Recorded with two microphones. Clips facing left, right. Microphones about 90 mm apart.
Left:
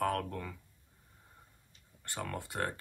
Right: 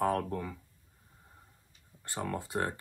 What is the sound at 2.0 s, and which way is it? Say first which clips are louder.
Speech: right 4 dB; 20° right (ahead or behind).